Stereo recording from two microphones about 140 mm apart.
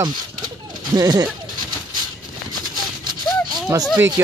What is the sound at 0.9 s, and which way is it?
Speech, 30° right (ahead or behind).